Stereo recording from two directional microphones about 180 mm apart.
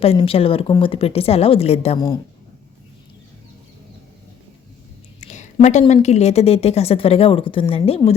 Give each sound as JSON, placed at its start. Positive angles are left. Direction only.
{"t": 0.0, "sound": "a woman's voice", "side_deg": 30}
{"t": 5.3, "sound": "a sound", "side_deg": 40}
{"t": 5.9, "sound": "a woman's voice", "side_deg": 40}